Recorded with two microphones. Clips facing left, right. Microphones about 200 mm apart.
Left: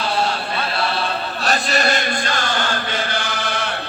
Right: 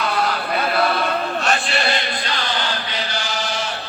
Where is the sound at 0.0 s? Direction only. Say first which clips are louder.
Even; 30° left (ahead or behind).